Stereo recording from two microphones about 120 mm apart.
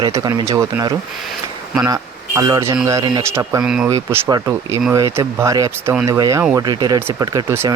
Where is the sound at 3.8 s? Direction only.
25° right (ahead or behind).